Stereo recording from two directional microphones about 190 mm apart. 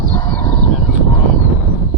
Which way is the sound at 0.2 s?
25° left (ahead or behind).